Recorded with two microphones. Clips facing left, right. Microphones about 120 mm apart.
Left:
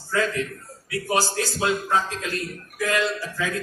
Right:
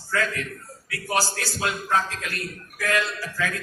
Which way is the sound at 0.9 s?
20° left (ahead or behind).